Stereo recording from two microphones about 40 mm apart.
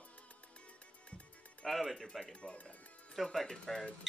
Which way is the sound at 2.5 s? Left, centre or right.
Left.